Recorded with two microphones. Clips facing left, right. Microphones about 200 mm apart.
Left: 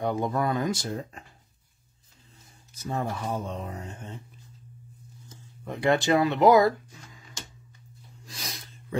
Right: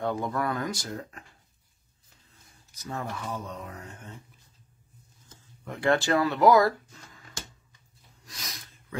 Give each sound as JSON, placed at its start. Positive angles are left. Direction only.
{"t": 0.0, "sound": "speech", "side_deg": 20}
{"t": 2.7, "sound": "speech", "side_deg": 25}
{"t": 5.7, "sound": "speech", "side_deg": 20}
{"t": 8.3, "sound": "sneeze", "side_deg": 30}